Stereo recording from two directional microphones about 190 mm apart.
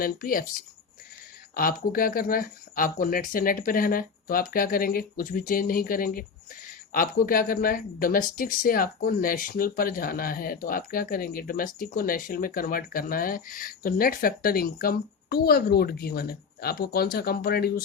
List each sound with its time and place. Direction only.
0.0 s speech: 50° left (ahead or behind)
1.5 s speech: 50° left (ahead or behind)